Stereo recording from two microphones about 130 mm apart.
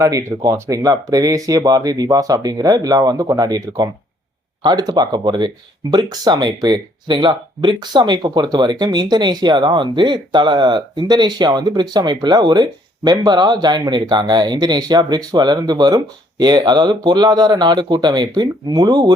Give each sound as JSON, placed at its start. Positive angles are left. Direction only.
{"t": 0.0, "sound": "speech", "side_deg": -25}